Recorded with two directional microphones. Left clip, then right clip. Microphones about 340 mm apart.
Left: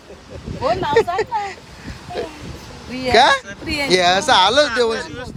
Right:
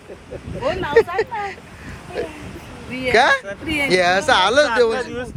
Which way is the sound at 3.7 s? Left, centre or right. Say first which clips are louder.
Left 1 dB; centre.